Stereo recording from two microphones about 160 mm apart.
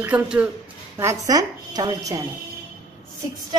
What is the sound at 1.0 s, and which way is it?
Speech, 20° right (ahead or behind).